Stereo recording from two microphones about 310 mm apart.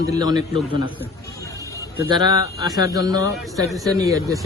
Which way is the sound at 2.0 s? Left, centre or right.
Centre.